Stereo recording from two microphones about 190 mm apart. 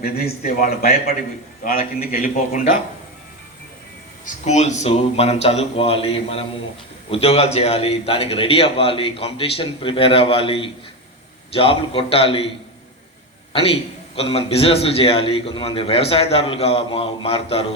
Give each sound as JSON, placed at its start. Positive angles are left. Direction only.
{"t": 0.0, "sound": "a man's voice", "side_deg": 55}
{"t": 4.4, "sound": "a man's voice", "side_deg": 35}
{"t": 13.5, "sound": "a man's voice", "side_deg": 30}